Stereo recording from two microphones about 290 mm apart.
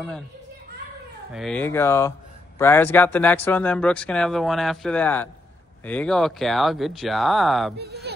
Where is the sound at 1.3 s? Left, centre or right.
Centre.